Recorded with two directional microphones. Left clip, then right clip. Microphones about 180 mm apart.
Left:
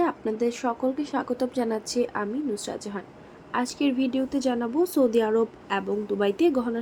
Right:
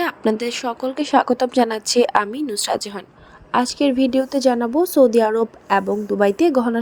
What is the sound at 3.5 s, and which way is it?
A woman's voice, 30° right (ahead or behind).